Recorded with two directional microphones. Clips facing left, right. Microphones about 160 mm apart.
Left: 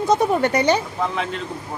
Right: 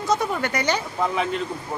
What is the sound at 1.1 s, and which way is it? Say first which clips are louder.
Speech: right 1 dB; 5° right (ahead or behind).